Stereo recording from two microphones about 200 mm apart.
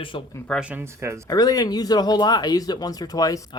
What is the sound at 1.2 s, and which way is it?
Speech, 20° left (ahead or behind).